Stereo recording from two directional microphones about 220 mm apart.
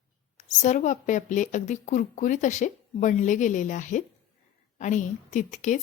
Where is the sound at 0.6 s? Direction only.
35° left (ahead or behind).